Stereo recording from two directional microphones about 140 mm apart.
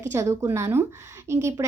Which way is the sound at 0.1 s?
20° right (ahead or behind).